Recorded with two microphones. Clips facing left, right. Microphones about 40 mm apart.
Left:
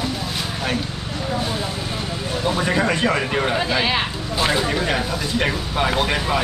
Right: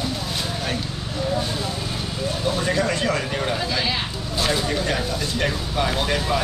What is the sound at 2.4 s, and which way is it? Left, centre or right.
Speech, left.